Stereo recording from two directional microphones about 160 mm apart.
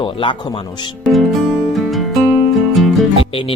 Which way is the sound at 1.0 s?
Centre (ahead or behind).